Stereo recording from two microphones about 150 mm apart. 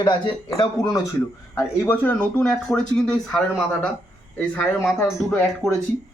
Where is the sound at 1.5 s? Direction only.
10° left (ahead or behind).